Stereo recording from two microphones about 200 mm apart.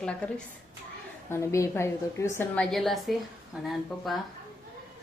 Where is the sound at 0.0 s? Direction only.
5° left (ahead or behind).